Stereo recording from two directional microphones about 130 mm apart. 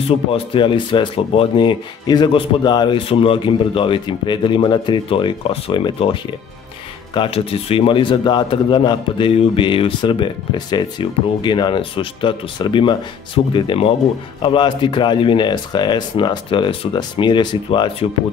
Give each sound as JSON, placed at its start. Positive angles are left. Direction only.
{"t": 0.0, "sound": "a man's voice", "side_deg": 45}
{"t": 7.2, "sound": "a man's voice", "side_deg": 50}